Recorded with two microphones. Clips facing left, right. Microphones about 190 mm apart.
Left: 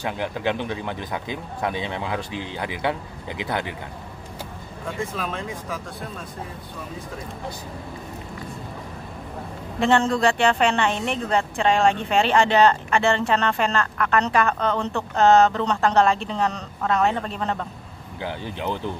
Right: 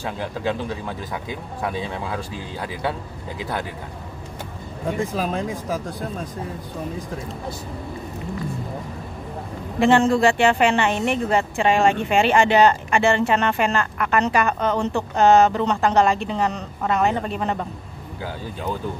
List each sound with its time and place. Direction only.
0.2 s speech: 20° left (ahead or behind)
5.1 s speech: 40° right (ahead or behind)
9.8 s a woman's voice: 5° right (ahead or behind)
18.2 s speech: 20° left (ahead or behind)